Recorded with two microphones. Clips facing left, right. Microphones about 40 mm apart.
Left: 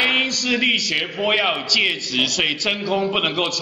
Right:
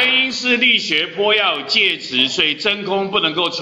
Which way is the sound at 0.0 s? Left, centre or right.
Centre.